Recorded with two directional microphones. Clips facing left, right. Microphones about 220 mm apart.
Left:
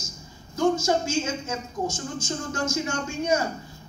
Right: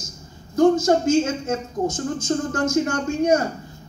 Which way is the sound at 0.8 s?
55° right (ahead or behind).